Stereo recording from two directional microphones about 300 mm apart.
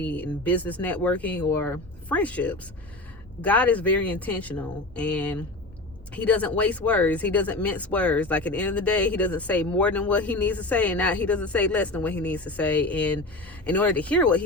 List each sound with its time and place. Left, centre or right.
0.0 s speech: centre